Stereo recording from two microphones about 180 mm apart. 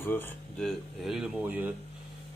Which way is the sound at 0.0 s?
10° left (ahead or behind).